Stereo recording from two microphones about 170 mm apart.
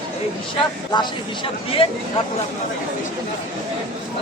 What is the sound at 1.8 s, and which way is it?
Speech, 30° left (ahead or behind).